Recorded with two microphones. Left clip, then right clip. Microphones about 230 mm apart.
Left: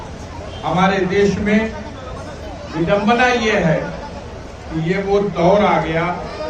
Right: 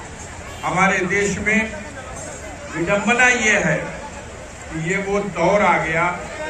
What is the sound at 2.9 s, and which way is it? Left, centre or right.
Speech, centre.